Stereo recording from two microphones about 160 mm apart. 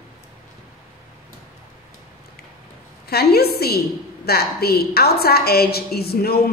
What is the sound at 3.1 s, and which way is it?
A woman's voice, 80° left.